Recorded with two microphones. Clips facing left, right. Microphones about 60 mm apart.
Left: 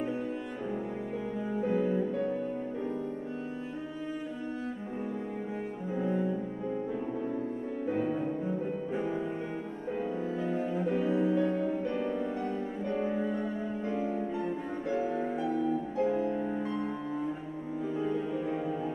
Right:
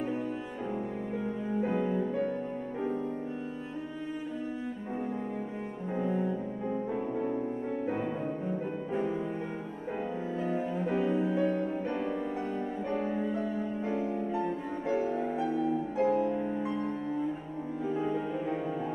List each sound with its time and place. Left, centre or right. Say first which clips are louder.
1.5 s music: left 1 dB; centre
5.9 s music: even; centre
7.8 s music: left 4 dB; centre
8.5 s music: left 1 dB; centre
10.4 s music: even; centre